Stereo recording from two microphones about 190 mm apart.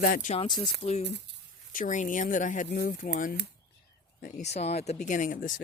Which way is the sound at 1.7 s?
45° left (ahead or behind).